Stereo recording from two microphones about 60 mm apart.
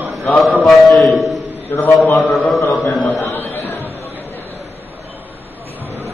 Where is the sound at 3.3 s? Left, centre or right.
Left.